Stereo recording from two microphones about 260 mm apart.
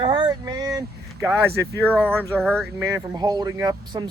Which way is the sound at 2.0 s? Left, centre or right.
Centre.